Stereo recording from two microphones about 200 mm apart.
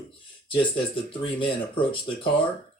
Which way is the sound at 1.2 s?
25° left (ahead or behind).